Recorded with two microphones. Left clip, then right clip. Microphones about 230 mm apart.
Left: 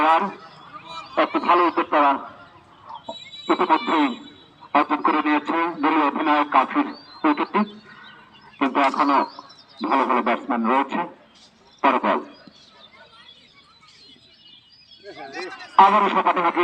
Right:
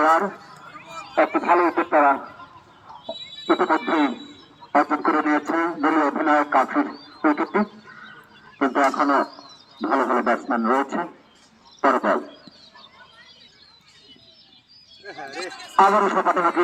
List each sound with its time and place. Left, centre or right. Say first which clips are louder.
0.0 s a sound: even; left
0.9 s speech: right 1 dB; left
3.1 s neigh: right 1 dB; left
4.7 s a man's voice: even; left
11.8 s wild animals: even; left
15.7 s a man's voice: left 2 dB; left